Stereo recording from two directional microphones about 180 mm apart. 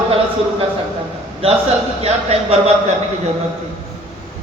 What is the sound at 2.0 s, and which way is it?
Speech, 35° right (ahead or behind).